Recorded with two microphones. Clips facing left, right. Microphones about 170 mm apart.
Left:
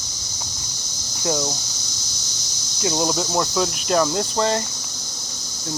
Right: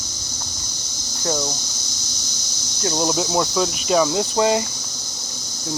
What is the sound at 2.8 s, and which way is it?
Speech, 5° left (ahead or behind).